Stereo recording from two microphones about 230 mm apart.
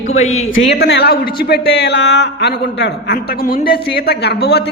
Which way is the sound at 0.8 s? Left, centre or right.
Left.